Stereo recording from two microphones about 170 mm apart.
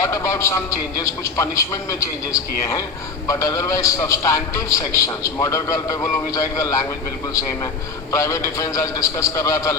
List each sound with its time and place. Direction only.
0.0 s a man's voice: 15° left (ahead or behind)
8.1 s a man's voice: 20° left (ahead or behind)